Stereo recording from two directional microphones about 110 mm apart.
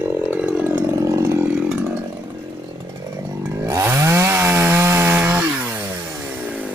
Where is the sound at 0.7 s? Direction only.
20° right (ahead or behind).